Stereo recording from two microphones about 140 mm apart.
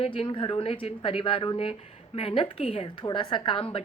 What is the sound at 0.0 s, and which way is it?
A woman's voice, 40° left (ahead or behind).